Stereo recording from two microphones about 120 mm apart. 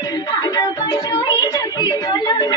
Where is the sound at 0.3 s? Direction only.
35° left (ahead or behind).